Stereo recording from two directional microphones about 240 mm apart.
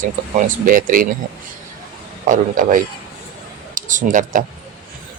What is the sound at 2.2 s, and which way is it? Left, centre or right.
A man's voice, right.